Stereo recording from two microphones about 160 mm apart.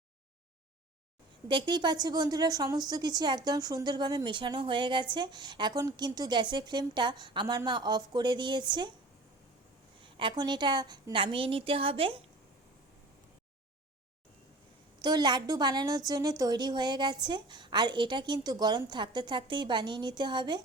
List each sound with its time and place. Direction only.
1.5 s a woman's voice: 30° right (ahead or behind)
10.0 s a woman's voice: 30° right (ahead or behind)
14.9 s a woman's voice: 25° right (ahead or behind)